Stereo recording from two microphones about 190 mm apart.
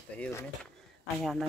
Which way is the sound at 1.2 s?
Centre (ahead or behind).